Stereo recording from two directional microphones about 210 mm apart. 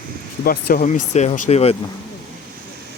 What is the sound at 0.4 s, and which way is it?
Speech, 45° left (ahead or behind).